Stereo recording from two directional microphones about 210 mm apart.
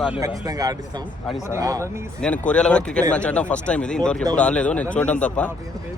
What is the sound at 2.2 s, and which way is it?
A man's voice, 5° left (ahead or behind).